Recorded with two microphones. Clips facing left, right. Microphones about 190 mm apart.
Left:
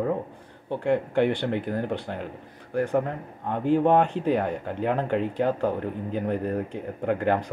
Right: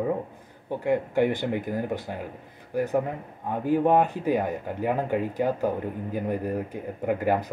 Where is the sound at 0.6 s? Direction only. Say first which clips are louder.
Left 1 dB; 10° right (ahead or behind).